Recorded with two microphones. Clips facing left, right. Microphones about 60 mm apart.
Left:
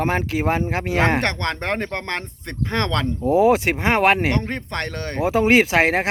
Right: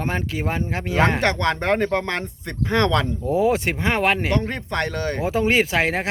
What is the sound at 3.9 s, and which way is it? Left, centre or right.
Speech, left.